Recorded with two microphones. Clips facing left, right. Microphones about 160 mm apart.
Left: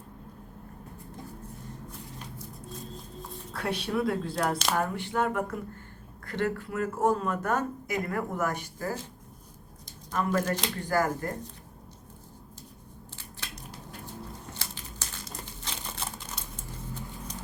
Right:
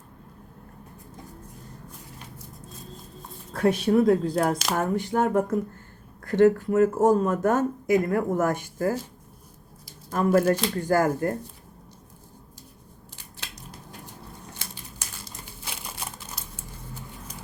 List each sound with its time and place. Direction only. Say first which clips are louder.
3.5 s speech: right 10 dB; 45° right (ahead or behind)
10.2 s speech: right 7 dB; 45° right (ahead or behind)
13.1 s scissors: right 1 dB; 15° right (ahead or behind)
15.4 s crumpling: even; 10° right (ahead or behind)